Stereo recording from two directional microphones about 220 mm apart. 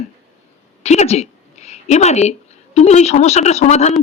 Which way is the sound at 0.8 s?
30° left (ahead or behind).